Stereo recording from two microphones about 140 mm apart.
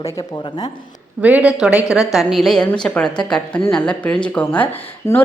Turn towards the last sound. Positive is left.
turn(degrees=15)  # may be behind; listen again after turning